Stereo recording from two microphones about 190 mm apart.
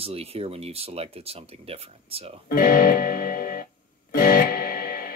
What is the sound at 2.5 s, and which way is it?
Music, 50° left (ahead or behind).